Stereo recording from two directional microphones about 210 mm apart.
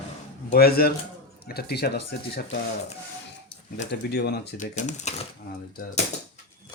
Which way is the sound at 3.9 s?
50° left (ahead or behind).